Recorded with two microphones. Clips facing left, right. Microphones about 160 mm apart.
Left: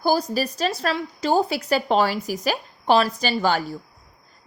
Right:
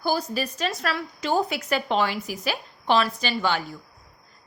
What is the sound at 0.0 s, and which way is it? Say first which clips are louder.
Speech: left 4 dB; 40° left (ahead or behind).